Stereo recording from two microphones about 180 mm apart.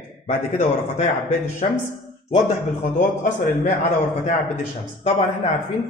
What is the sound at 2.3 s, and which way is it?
A man's voice, 40° left (ahead or behind).